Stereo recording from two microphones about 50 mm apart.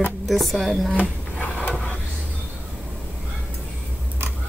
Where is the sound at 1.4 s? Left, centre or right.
Left.